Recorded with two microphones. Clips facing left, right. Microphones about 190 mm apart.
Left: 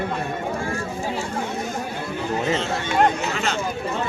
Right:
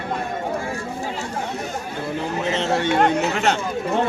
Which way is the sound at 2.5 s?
65° right (ahead or behind).